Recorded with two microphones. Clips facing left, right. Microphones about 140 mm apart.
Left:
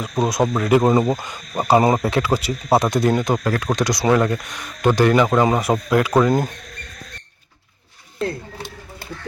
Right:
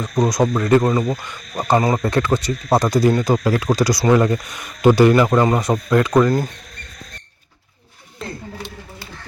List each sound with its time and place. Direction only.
0.0 s speech: 5° left (ahead or behind)
0.8 s speech: 25° left (ahead or behind)
2.0 s speech: 5° left (ahead or behind)